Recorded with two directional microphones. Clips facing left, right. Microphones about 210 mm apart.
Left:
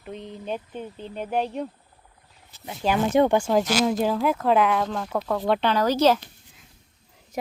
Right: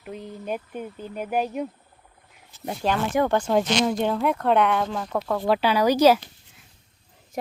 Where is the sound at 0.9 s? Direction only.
30° left (ahead or behind).